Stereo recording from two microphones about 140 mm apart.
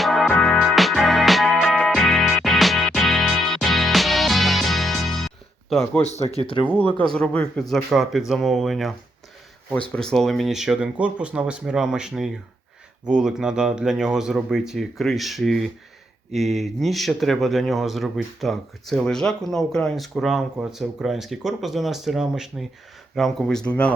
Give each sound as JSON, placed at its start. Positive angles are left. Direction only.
{"t": 0.0, "sound": "music", "side_deg": 0}
{"t": 6.0, "sound": "speech", "side_deg": 50}
{"t": 6.7, "sound": "speech", "side_deg": 10}
{"t": 9.9, "sound": "speech", "side_deg": 5}